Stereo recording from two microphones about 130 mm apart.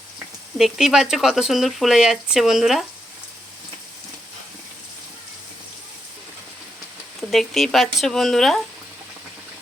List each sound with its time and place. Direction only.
0.5 s speech: centre (ahead or behind)
7.2 s speech: centre (ahead or behind)